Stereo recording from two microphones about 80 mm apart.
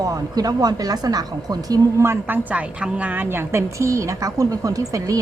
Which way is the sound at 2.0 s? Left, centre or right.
Right.